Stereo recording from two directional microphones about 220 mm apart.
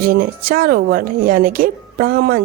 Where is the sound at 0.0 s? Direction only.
40° right (ahead or behind).